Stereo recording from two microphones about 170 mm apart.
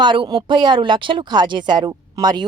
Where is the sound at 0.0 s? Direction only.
25° right (ahead or behind).